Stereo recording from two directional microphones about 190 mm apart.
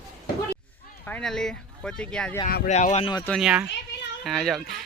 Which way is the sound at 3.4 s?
5° right (ahead or behind).